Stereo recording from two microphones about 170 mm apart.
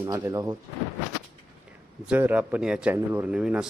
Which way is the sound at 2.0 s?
10° right (ahead or behind).